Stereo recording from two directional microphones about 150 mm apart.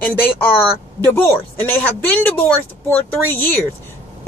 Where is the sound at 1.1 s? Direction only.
15° left (ahead or behind).